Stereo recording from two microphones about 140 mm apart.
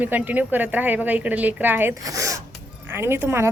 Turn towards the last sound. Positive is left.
turn(degrees=-20)  # may be behind; listen again after turning